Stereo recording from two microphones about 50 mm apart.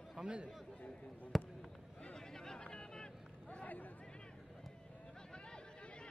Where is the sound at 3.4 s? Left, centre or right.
Left.